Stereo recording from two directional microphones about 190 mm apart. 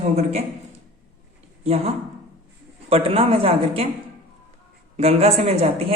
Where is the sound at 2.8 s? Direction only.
30° right (ahead or behind).